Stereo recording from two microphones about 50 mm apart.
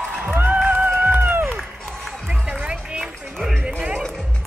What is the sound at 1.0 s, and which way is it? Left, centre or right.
Run, right.